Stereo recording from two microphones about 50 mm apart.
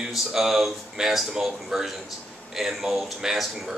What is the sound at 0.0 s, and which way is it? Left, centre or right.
Speech, centre.